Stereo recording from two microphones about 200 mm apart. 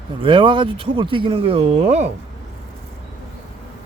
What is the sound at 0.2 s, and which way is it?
Speech, 25° right (ahead or behind).